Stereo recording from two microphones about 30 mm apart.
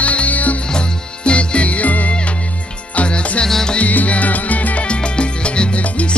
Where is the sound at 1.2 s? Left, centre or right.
Left.